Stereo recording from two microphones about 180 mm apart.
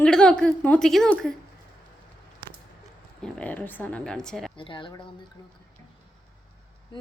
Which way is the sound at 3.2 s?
10° left (ahead or behind).